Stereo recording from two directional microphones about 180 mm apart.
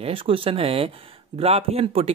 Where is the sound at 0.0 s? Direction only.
30° right (ahead or behind).